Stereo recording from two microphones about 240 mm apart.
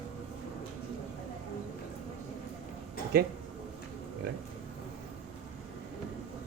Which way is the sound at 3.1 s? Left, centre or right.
Right.